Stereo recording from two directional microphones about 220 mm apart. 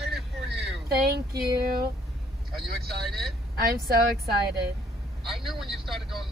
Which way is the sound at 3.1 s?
Centre (ahead or behind).